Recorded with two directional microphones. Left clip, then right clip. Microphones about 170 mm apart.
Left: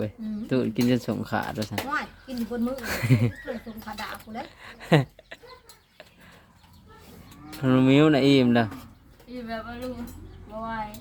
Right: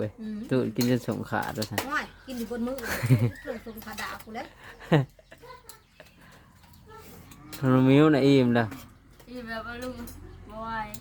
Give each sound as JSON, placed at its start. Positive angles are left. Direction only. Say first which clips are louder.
{"t": 0.0, "sound": "speech", "louder": "left 1 dB", "side_deg": -5}
{"t": 7.6, "sound": "speech", "louder": "left 1 dB", "side_deg": -5}